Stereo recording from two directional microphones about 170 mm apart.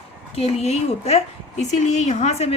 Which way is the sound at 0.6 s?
40° left (ahead or behind).